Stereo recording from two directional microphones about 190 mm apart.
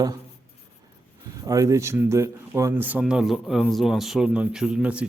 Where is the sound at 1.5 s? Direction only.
15° right (ahead or behind).